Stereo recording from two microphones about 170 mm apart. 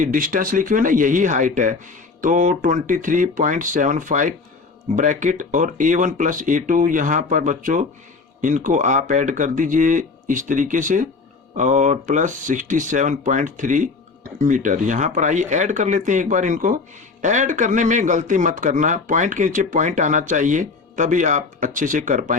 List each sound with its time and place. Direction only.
0.0 s speech: 55° right (ahead or behind)